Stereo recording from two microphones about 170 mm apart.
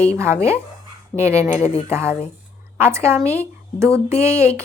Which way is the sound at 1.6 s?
35° left (ahead or behind).